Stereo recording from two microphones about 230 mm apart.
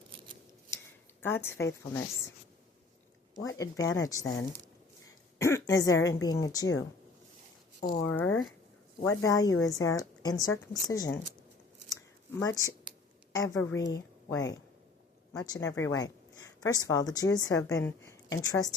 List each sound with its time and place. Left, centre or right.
1.2 s speech: centre
3.4 s speech: centre
5.4 s speech: centre
7.8 s speech: left
8.0 s speech: centre
11.9 s a sound: centre
13.3 s speech: centre